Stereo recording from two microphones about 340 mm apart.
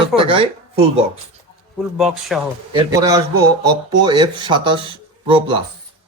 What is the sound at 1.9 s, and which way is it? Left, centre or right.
Speech, centre.